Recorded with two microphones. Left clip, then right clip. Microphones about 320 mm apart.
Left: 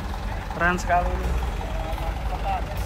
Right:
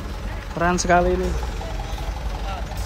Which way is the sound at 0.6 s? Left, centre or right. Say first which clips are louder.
Right 3 dB; centre.